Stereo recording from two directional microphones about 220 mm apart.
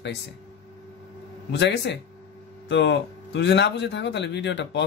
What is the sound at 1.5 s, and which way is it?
Speech, 50° left (ahead or behind).